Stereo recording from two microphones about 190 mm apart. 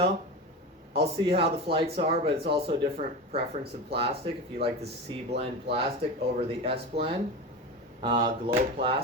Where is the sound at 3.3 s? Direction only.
30° right (ahead or behind).